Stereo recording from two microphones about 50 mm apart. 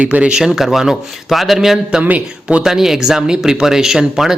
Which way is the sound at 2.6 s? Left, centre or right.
Centre.